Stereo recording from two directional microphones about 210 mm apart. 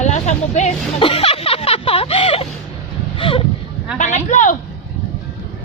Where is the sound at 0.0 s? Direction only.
35° left (ahead or behind).